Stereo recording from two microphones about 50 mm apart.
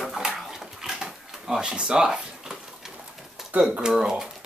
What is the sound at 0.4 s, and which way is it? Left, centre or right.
Dog, centre.